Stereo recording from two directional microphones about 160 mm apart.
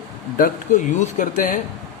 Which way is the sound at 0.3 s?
55° left (ahead or behind).